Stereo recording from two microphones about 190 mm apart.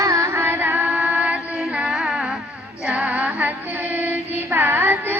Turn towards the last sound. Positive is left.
turn(degrees=-10)  # may be behind; listen again after turning